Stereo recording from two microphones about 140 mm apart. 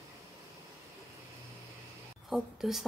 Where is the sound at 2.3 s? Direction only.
Centre (ahead or behind).